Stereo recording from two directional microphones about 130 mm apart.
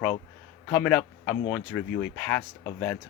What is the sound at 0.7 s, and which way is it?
Speech, 5° left (ahead or behind).